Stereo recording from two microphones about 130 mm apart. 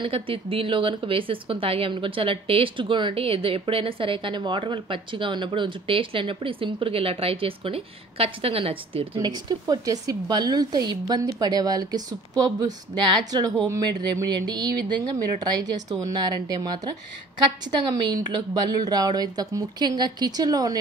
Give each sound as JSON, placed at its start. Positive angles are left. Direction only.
{"t": 0.0, "sound": "a woman's voice", "side_deg": -45}
{"t": 9.2, "sound": "speech", "side_deg": -30}
{"t": 18.0, "sound": "speech", "side_deg": -35}